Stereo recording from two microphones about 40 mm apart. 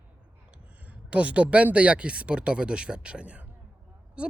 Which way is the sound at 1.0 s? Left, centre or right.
Right.